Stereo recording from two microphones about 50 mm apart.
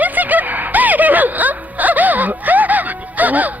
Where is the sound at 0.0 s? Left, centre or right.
Right.